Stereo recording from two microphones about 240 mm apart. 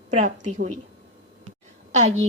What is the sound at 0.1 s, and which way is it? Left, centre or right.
Speech, right.